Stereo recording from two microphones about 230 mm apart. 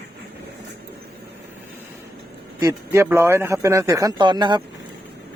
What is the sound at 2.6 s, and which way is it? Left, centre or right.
A man's voice, centre.